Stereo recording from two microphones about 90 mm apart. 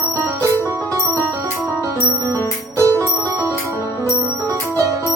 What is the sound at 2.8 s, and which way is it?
Bicycle bell, 35° right (ahead or behind).